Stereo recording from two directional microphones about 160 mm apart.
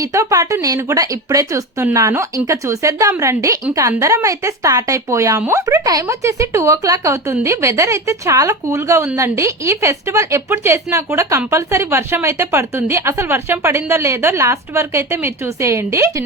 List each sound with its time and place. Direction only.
0.0 s a woman's voice: 20° right (ahead or behind)